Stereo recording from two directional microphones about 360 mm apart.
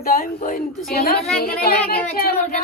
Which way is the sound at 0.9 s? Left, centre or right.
Left.